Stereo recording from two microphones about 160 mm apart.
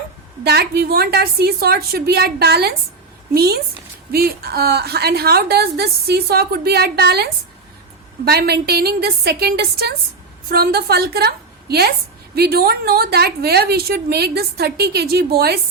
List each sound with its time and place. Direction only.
0.4 s a woman's voice: 80° right